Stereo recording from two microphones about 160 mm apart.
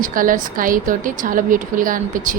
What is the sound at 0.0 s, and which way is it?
A woman's voice, 60° right (ahead or behind).